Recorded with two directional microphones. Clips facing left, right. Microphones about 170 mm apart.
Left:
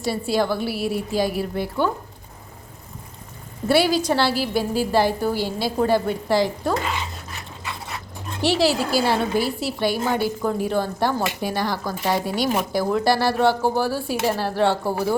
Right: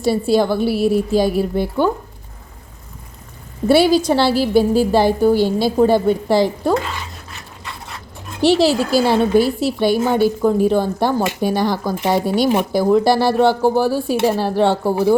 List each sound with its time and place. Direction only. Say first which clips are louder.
0.0 s a woman's voice: right 7 dB; 25° right (ahead or behind)
3.7 s a woman's voice: right 6 dB; 30° right (ahead or behind)
8.4 s a woman's voice: right 6 dB; 25° right (ahead or behind)